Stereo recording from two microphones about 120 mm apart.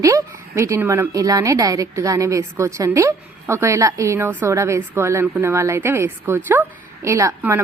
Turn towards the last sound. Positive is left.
turn(degrees=-25)  # may be behind; listen again after turning